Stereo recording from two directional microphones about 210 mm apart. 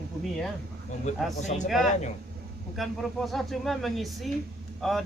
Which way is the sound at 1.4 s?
35° left (ahead or behind).